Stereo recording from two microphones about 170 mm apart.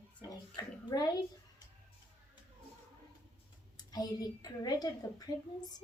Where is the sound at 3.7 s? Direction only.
20° left (ahead or behind).